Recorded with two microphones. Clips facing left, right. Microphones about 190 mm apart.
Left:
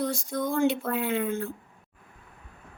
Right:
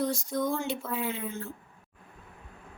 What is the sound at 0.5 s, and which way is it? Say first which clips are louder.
Speech: left 7 dB; 55° left (ahead or behind).